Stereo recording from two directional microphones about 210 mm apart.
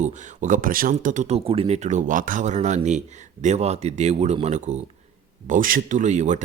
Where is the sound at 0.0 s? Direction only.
35° right (ahead or behind).